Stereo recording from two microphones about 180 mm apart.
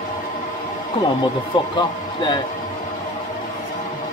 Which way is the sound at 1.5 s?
25° left (ahead or behind).